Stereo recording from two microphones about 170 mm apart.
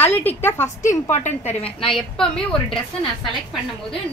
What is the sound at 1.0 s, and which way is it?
Speech, 45° left (ahead or behind).